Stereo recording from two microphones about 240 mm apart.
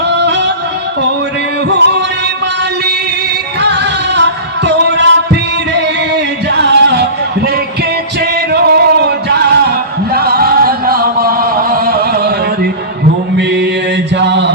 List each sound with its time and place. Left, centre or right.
0.1 s music: right
1.7 s music: right
3.6 s music: right
13.3 s mantra: right
14.2 s a sound: right